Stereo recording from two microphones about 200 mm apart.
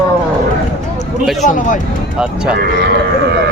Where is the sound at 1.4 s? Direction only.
40° left (ahead or behind).